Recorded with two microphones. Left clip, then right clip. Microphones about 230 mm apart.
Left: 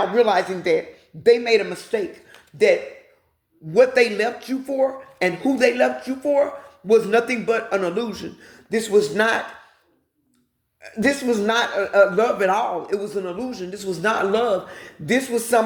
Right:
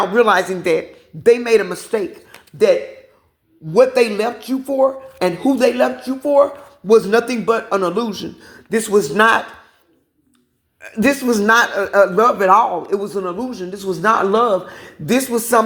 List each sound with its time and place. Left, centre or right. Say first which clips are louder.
0.0 s speech: right 4 dB; right
3.7 s speech: right 3 dB; right
11.0 s speech: right 4 dB; centre
11.3 s speech: right 6 dB; right